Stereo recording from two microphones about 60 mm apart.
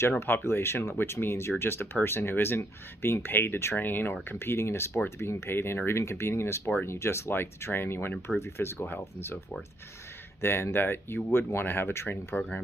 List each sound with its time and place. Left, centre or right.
0.2 s speech: left
3.7 s speech: left